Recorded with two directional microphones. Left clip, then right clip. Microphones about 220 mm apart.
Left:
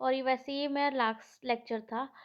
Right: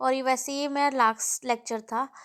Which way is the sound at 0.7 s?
25° right (ahead or behind).